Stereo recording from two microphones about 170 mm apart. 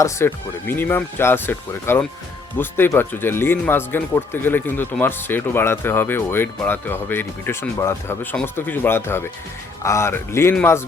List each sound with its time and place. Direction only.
0.0 s speech: 15° left (ahead or behind)